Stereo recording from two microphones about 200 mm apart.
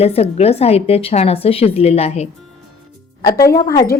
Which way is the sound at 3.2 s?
15° left (ahead or behind).